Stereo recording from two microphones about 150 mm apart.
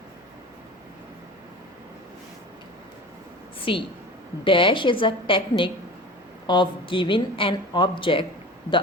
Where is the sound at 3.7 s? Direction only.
35° left (ahead or behind).